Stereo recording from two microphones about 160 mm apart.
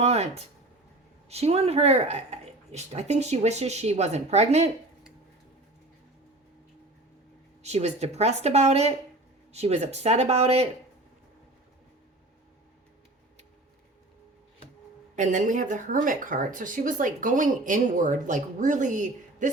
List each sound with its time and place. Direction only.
0.0 s speech: 40° right (ahead or behind)
7.6 s speech: 45° right (ahead or behind)
15.1 s speech: 50° right (ahead or behind)